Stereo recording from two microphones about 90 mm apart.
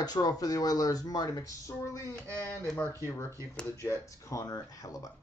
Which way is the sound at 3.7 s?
30° left (ahead or behind).